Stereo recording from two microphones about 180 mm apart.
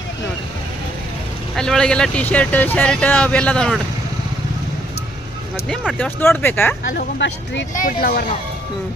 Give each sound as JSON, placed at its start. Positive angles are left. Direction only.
{"t": 1.5, "sound": "speech", "side_deg": 5}
{"t": 5.6, "sound": "speech", "side_deg": 0}
{"t": 6.0, "sound": "speech", "side_deg": 10}
{"t": 6.9, "sound": "speech", "side_deg": 75}
{"t": 7.7, "sound": "speech", "side_deg": 50}